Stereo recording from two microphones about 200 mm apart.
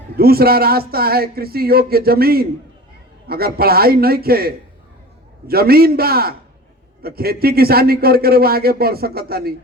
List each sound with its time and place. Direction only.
0.2 s speech: 50° right (ahead or behind)